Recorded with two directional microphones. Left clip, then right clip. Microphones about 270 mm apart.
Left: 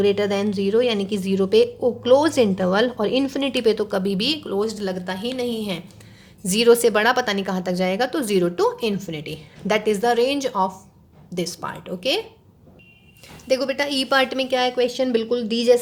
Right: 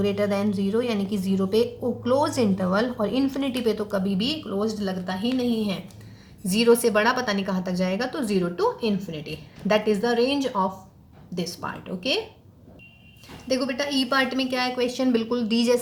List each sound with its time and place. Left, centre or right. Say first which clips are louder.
0.0 s a woman's voice: left 4 dB; left
13.5 s a woman's voice: left 4 dB; left